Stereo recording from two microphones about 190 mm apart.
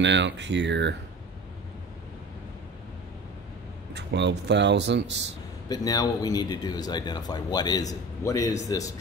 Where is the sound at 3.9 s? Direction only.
65° right (ahead or behind).